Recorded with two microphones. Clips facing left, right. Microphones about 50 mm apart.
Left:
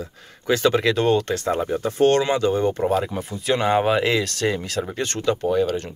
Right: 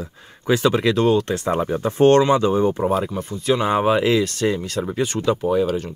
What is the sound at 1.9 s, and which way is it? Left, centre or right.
Speech, right.